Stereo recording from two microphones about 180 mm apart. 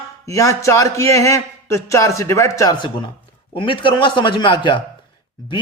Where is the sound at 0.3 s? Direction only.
15° left (ahead or behind).